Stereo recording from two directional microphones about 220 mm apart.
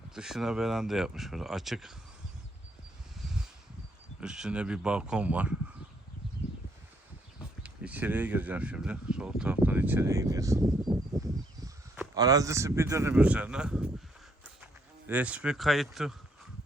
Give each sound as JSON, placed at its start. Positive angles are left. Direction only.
{"t": 0.1, "sound": "speech", "side_deg": 0}
{"t": 4.2, "sound": "speech", "side_deg": -5}
{"t": 7.6, "sound": "speech", "side_deg": -5}
{"t": 11.1, "sound": "a sound", "side_deg": -15}
{"t": 11.6, "sound": "speech", "side_deg": -15}